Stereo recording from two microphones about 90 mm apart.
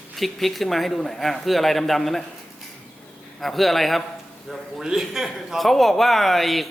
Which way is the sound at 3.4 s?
Centre (ahead or behind).